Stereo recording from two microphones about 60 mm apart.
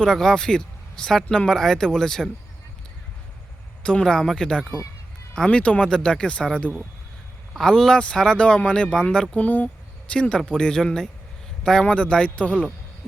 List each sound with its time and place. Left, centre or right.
0.0 s speech: centre
3.8 s speech: centre
7.5 s speech: centre
9.3 s speech: left